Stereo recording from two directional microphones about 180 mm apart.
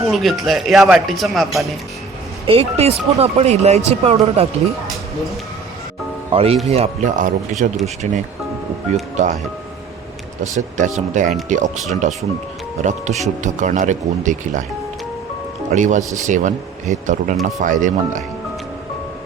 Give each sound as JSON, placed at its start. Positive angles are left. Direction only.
{"t": 0.0, "sound": "speech", "side_deg": 0}
{"t": 2.5, "sound": "speech", "side_deg": -35}
{"t": 6.3, "sound": "speech", "side_deg": -35}
{"t": 9.2, "sound": "speech", "side_deg": -40}
{"t": 10.8, "sound": "speech", "side_deg": -45}
{"t": 15.7, "sound": "speech", "side_deg": -40}